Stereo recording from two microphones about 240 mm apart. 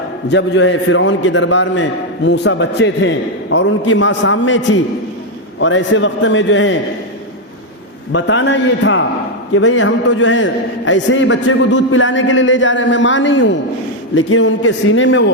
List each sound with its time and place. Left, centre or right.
0.3 s a man's voice: left
8.1 s a man's voice: left